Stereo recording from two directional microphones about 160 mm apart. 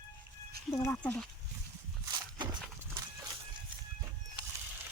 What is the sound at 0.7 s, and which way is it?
Speech, 15° left (ahead or behind).